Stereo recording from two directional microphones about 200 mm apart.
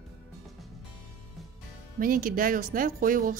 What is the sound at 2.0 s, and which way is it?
Speech, 45° right (ahead or behind).